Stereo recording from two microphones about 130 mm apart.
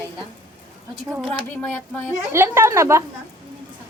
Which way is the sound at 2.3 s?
20° right (ahead or behind).